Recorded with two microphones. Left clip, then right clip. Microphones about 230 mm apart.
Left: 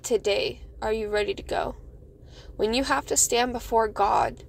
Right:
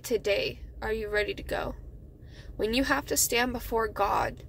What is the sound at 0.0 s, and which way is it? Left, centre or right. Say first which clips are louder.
A woman's voice: left 3 dB; centre.